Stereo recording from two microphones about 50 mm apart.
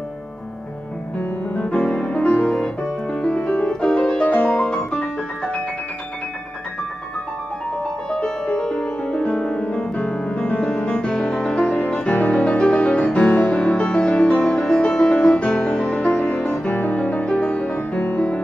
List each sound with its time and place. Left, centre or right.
1.7 s music: centre
2.4 s music: centre
4.6 s piano: centre
8.1 s music: centre
16.4 s music: left